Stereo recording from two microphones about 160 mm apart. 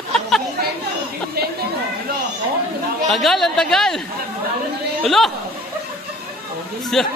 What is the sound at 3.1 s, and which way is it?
Speech, centre (ahead or behind).